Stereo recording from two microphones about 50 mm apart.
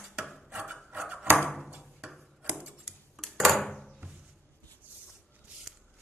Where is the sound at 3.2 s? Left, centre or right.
Centre.